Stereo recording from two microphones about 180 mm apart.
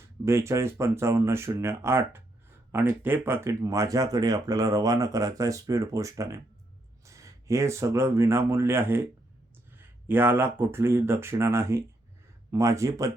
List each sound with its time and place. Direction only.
0.3 s speech: 15° right (ahead or behind)